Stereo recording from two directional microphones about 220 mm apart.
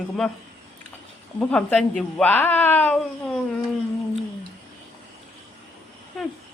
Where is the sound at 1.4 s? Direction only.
5° left (ahead or behind).